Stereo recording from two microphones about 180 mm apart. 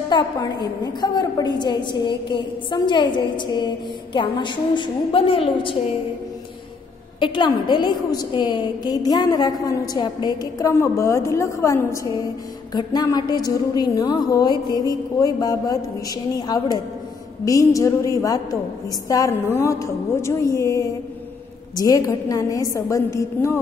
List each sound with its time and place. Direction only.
0.1 s a woman's voice: 25° left (ahead or behind)
7.2 s a woman's voice: 25° left (ahead or behind)